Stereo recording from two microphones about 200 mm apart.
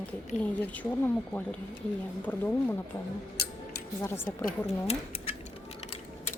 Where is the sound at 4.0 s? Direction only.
10° left (ahead or behind).